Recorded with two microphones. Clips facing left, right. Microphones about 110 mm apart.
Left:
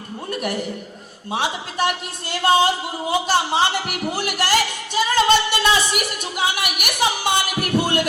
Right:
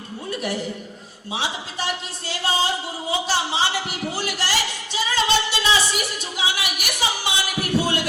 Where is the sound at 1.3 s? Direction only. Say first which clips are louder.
Left 4 dB; 55° left (ahead or behind).